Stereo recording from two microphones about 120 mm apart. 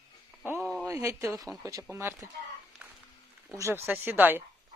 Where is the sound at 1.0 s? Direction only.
25° right (ahead or behind).